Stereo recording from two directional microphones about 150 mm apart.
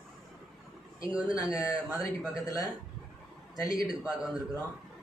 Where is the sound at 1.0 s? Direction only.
25° left (ahead or behind).